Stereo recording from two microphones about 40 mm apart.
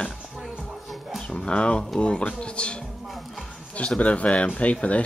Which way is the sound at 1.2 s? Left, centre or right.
Left.